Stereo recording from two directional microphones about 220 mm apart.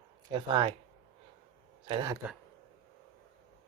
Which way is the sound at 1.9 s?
20° right (ahead or behind).